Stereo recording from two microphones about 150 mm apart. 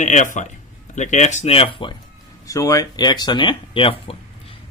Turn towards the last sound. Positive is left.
turn(degrees=35)  # may be behind; listen again after turning